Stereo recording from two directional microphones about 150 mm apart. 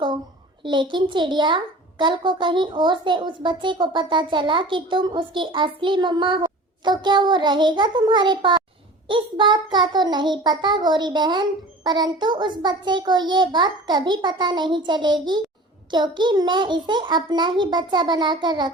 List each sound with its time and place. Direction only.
0.6 s a child's voice: 30° right (ahead or behind)
9.0 s child singing: 35° right (ahead or behind)